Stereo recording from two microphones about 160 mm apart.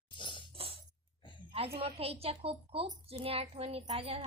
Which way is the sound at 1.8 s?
35° right (ahead or behind).